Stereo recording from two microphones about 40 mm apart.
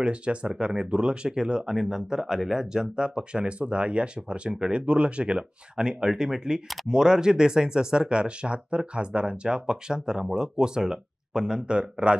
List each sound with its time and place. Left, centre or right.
0.0 s speech: right
3.4 s speech: right